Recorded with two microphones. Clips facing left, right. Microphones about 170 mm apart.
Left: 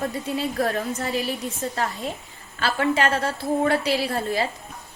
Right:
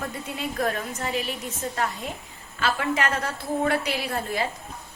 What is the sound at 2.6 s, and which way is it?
A woman's voice, 30° left (ahead or behind).